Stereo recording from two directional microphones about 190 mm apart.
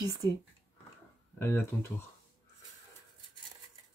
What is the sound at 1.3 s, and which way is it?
Speech, 10° left (ahead or behind).